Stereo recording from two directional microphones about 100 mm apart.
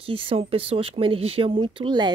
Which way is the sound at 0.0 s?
65° right (ahead or behind).